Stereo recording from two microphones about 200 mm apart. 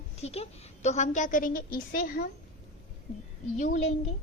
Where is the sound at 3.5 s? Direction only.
35° left (ahead or behind).